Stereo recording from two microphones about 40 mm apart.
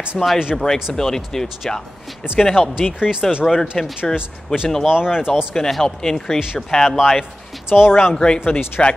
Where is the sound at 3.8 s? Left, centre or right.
Centre.